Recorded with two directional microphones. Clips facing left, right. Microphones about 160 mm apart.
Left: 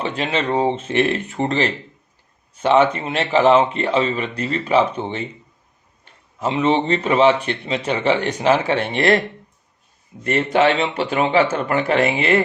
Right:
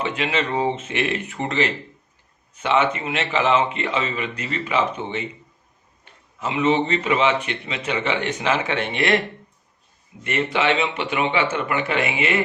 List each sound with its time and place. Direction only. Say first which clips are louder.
0.0 s a man's voice: left 2 dB; 35° left (ahead or behind)
6.4 s a man's voice: left 2 dB; 30° left (ahead or behind)
10.2 s a man's voice: left 5 dB; 40° left (ahead or behind)